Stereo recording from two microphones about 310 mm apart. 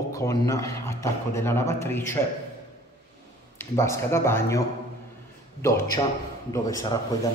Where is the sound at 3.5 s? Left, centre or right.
Centre.